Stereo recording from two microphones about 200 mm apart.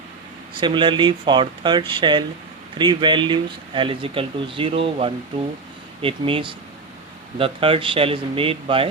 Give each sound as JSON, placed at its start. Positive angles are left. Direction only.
{"t": 0.6, "sound": "speech", "side_deg": -25}